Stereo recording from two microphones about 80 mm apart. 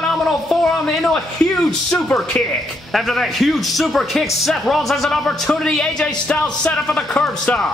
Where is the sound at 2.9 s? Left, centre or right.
Centre.